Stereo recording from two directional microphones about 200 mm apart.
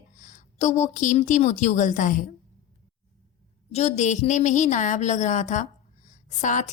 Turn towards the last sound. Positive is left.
turn(degrees=40)  # may be behind; listen again after turning